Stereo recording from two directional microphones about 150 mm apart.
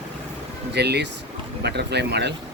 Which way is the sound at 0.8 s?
90° right.